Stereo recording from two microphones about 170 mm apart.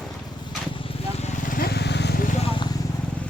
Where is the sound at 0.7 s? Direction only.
35° left (ahead or behind); by 2.1 s 85° left.